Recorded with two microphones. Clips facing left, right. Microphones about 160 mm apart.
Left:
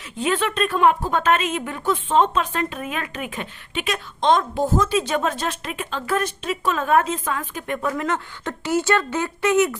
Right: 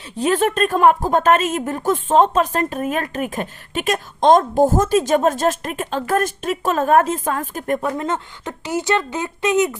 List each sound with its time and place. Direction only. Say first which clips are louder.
0.2 s speech: right 4 dB; 40° right (ahead or behind); by 9.7 s 20° right (ahead or behind)